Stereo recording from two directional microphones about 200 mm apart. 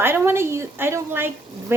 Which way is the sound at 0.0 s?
10° right (ahead or behind).